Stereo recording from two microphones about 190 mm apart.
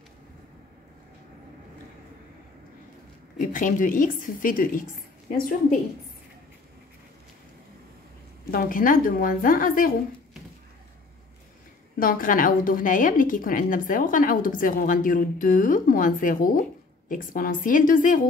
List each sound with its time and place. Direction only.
3.3 s a woman's voice: 45° left (ahead or behind)
8.5 s a woman's voice: 50° left (ahead or behind)
12.0 s a woman's voice: 45° left (ahead or behind)